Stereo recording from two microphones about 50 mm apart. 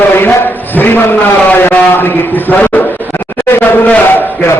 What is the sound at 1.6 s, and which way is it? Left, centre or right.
A man's voice, left.